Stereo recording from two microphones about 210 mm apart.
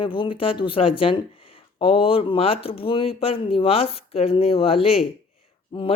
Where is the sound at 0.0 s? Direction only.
25° left (ahead or behind).